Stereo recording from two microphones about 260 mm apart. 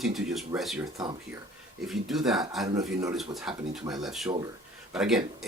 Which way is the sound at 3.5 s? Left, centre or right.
Centre.